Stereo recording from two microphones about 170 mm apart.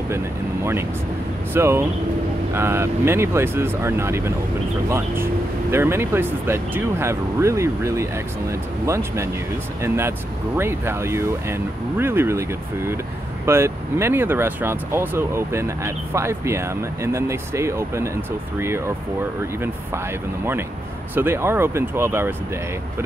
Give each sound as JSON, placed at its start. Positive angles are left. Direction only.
{"t": 1.5, "sound": "speech", "side_deg": -15}
{"t": 19.6, "sound": "speech", "side_deg": -15}